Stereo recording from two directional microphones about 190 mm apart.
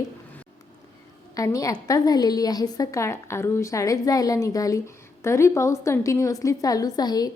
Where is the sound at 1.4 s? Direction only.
20° left (ahead or behind).